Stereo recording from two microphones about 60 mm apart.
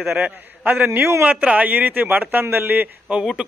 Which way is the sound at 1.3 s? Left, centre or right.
Right.